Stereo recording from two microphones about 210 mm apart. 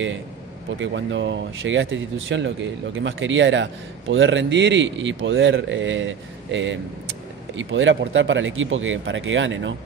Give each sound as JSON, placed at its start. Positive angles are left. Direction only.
{"t": 0.7, "sound": "speech", "side_deg": -60}